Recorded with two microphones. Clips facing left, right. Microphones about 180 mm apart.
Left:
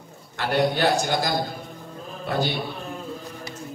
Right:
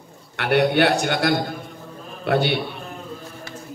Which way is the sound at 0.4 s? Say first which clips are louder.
Right 4 dB; 65° right (ahead or behind).